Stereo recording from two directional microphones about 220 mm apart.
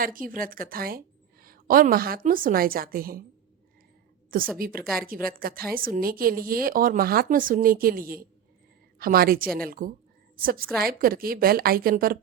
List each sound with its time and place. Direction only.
0.0 s a woman's voice: 40° right (ahead or behind)
4.5 s a woman's voice: 40° right (ahead or behind)